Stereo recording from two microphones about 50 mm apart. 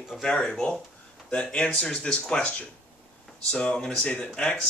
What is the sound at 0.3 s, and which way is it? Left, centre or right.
Speech, centre.